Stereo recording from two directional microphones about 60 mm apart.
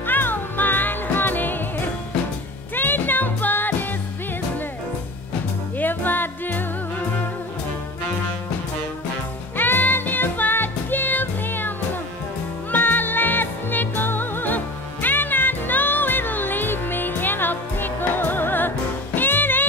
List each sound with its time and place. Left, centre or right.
0.0 s music: left
5.8 s music: left
9.6 s music: left